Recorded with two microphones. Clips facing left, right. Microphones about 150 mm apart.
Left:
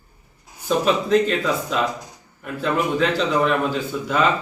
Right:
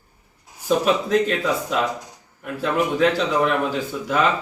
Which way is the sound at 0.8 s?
5° right (ahead or behind).